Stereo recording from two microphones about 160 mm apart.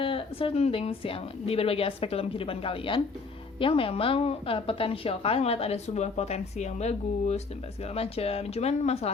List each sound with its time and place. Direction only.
0.0 s a woman's voice: 35° left (ahead or behind)